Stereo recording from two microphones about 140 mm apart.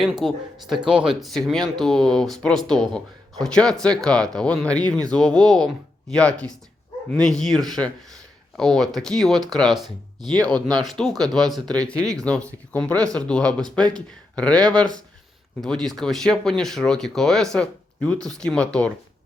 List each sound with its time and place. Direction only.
0.0 s speech: centre (ahead or behind)
10.2 s speech: 30° right (ahead or behind)
10.4 s speech: 5° left (ahead or behind)